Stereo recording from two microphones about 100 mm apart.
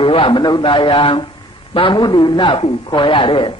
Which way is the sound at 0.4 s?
50° left (ahead or behind).